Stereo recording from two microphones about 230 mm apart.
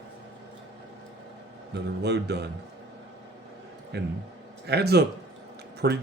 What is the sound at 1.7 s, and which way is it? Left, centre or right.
Speech, right.